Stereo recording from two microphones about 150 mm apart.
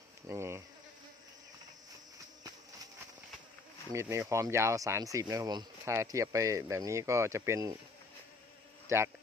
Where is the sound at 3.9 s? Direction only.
20° right (ahead or behind).